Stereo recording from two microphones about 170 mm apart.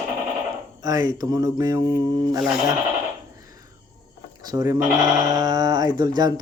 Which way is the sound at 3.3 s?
20° right (ahead or behind).